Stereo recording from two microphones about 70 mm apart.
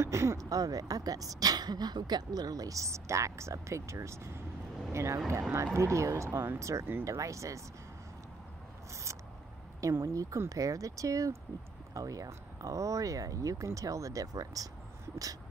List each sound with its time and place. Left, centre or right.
0.0 s speech: right
0.5 s speech: right
9.8 s speech: right